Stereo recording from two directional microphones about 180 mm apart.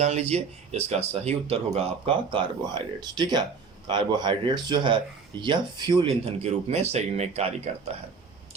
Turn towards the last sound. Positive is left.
turn(degrees=-35)  # may be behind; listen again after turning